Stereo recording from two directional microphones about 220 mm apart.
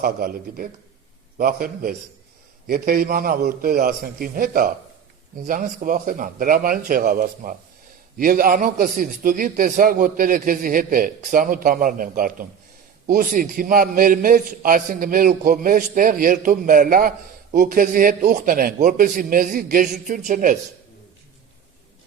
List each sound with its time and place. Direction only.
0.0 s a man's voice: 40° right (ahead or behind)